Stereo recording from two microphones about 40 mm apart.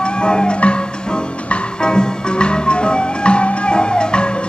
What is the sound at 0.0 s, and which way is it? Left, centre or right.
Music, left.